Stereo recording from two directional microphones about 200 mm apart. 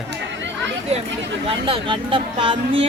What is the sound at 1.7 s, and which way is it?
Speech, 25° right (ahead or behind).